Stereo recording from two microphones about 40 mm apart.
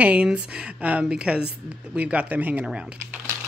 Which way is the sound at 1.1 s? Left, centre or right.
Right.